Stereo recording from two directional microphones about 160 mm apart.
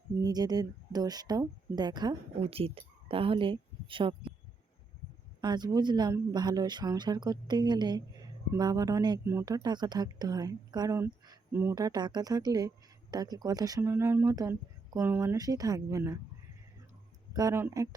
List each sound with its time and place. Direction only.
0.2 s speech: 25° right (ahead or behind)
5.4 s speech: 25° right (ahead or behind)
17.3 s speech: 20° right (ahead or behind)